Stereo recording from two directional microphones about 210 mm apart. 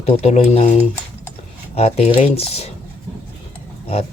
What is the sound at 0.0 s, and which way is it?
Speech, 30° left (ahead or behind).